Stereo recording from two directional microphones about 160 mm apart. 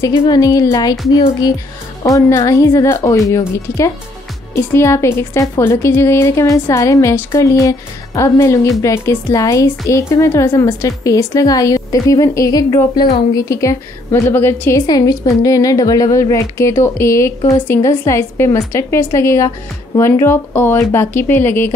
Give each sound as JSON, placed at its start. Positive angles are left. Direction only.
{"t": 0.3, "sound": "a woman's voice", "side_deg": 20}
{"t": 2.0, "sound": "a woman's voice", "side_deg": 20}